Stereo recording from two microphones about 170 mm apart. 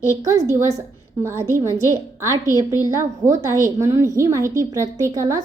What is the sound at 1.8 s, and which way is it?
A woman's voice, 15° right (ahead or behind).